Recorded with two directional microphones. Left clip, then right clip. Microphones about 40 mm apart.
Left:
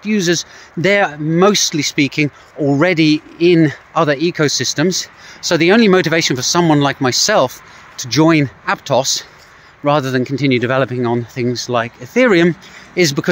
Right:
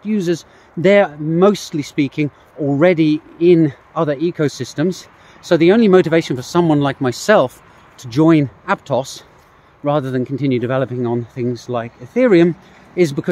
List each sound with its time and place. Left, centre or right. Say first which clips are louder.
0.0 s speech: left 4 dB; centre
0.9 s speech: left 1 dB; centre